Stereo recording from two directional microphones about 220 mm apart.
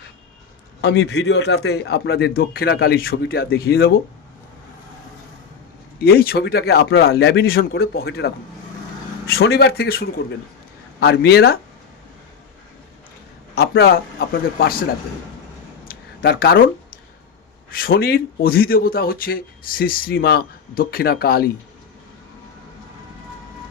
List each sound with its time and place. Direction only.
0.8 s speech: 45° left (ahead or behind)
6.0 s speech: 45° left (ahead or behind)
13.6 s speech: 45° left (ahead or behind)
15.9 s a sound: 40° left (ahead or behind)
17.7 s speech: 45° left (ahead or behind)